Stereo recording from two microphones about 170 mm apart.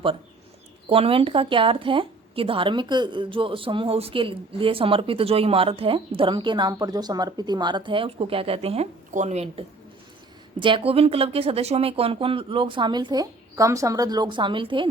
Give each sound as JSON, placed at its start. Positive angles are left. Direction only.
{"t": 0.9, "sound": "a woman's voice", "side_deg": -35}